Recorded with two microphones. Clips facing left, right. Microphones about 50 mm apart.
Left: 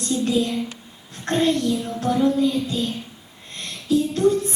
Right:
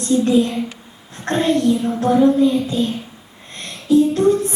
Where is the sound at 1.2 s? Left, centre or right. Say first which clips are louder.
Right 3 dB; right.